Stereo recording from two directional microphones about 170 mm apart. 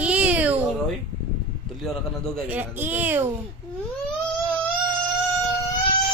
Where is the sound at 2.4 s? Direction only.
10° right (ahead or behind).